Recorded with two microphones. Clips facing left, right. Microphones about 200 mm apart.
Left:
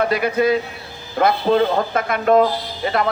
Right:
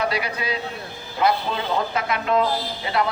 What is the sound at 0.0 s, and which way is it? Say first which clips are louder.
A man's voice: left 8 dB; 50° left (ahead or behind).